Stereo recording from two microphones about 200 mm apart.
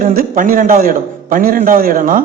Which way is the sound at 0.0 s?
45° right (ahead or behind).